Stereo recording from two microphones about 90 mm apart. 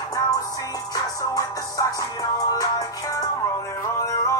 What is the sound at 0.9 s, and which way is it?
Music, 40° left (ahead or behind).